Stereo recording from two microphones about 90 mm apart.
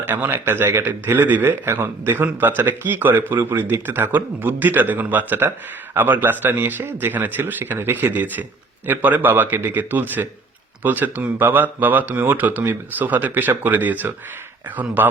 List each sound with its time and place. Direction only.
0.0 s a man's voice: 25° right (ahead or behind)